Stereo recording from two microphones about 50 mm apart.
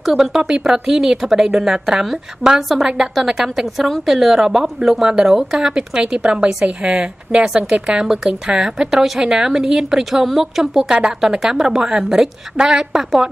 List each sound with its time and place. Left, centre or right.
0.0 s a woman's voice: centre
8.9 s a woman's voice: centre